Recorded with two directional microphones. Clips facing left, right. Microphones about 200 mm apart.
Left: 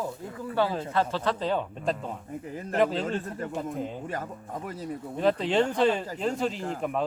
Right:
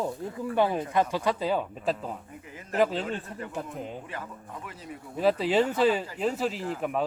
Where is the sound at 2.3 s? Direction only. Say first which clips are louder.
Left 8 dB; 40° left (ahead or behind).